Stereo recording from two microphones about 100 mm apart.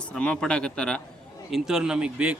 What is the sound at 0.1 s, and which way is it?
Speech, 10° left (ahead or behind).